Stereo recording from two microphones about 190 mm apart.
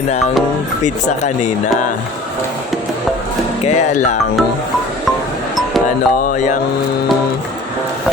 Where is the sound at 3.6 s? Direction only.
40° left (ahead or behind).